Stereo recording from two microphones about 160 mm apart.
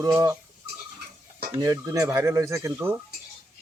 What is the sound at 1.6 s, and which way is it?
Speech, 20° right (ahead or behind).